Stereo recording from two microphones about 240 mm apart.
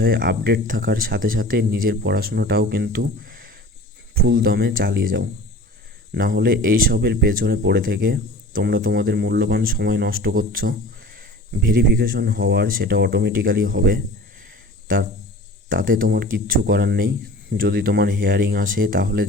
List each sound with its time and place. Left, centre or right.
0.0 s speech: right
15.7 s speech: right